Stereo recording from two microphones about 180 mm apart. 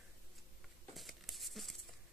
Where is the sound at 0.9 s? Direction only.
Centre (ahead or behind).